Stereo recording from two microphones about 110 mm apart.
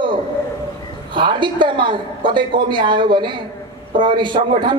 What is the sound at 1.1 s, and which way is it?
A man's voice, 45° right (ahead or behind).